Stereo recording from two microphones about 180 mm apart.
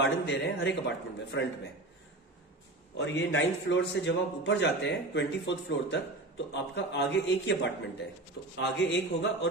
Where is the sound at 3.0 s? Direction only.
90° left.